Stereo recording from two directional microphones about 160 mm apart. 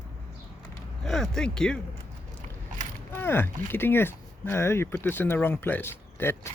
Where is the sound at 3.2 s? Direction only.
15° left (ahead or behind).